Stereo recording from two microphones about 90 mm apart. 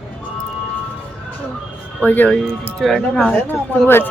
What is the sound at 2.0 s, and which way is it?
Speech, 20° left (ahead or behind).